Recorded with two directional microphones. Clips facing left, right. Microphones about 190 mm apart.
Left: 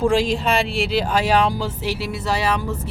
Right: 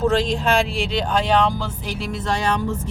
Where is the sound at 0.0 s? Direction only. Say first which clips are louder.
Left 1 dB; 10° left (ahead or behind).